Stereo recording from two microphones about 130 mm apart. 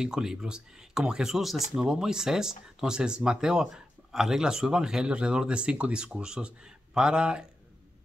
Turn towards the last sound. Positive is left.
turn(degrees=-5)  # may be behind; listen again after turning